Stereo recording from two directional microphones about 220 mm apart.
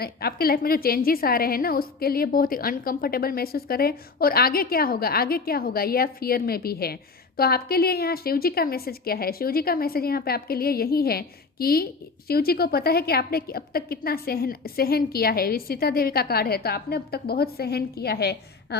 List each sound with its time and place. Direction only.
0.0 s a woman's voice: 45° left (ahead or behind)